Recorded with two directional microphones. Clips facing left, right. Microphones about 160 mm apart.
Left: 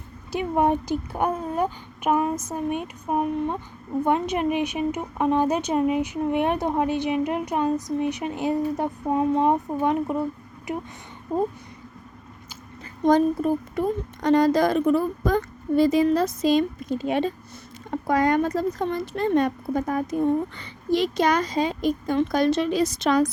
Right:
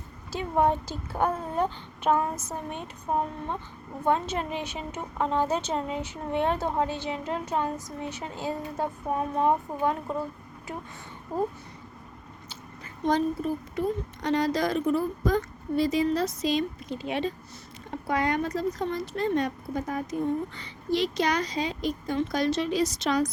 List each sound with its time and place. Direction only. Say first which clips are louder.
0.3 s a woman's voice: left 3 dB; 15° left (ahead or behind)
13.1 s speech: left 6 dB; 50° left (ahead or behind)